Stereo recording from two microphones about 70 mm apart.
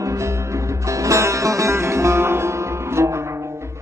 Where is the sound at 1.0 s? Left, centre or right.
Right.